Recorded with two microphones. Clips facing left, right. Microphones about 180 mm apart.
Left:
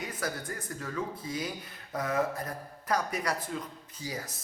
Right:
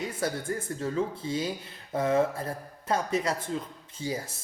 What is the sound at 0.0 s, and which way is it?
Speech, 30° right (ahead or behind).